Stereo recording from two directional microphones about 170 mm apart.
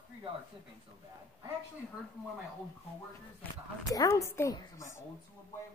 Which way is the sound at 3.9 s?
20° left (ahead or behind).